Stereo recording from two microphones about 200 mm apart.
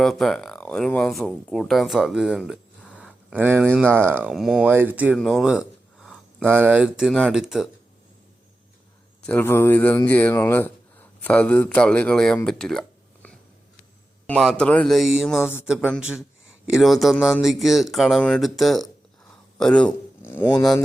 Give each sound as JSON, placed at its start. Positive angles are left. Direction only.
{"t": 0.0, "sound": "speech", "side_deg": 0}
{"t": 3.0, "sound": "a sound", "side_deg": -5}
{"t": 3.8, "sound": "speech", "side_deg": -10}
{"t": 9.2, "sound": "speech", "side_deg": 10}
{"t": 14.3, "sound": "speech", "side_deg": 5}
{"t": 15.4, "sound": "speech", "side_deg": 10}
{"t": 15.6, "sound": "speech", "side_deg": -5}